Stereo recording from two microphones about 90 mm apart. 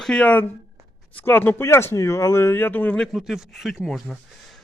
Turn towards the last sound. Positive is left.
turn(degrees=0)  # may be behind; listen again after turning